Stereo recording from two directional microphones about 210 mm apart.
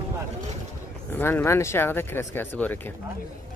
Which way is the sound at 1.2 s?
10° left (ahead or behind).